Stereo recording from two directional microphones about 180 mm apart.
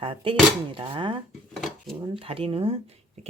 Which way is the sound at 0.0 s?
30° right (ahead or behind).